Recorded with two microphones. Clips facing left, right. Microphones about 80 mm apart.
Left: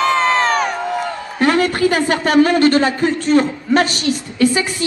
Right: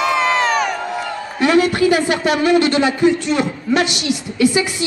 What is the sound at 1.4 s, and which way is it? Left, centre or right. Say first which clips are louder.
A man's voice: right 1 dB; left.